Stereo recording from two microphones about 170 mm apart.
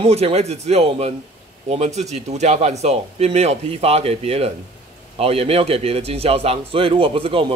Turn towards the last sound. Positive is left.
turn(degrees=-30)  # may be behind; listen again after turning